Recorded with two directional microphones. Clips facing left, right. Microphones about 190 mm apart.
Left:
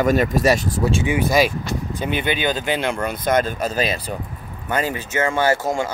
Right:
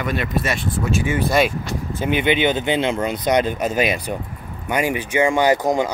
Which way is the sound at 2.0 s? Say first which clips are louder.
Right 5 dB; 15° right (ahead or behind).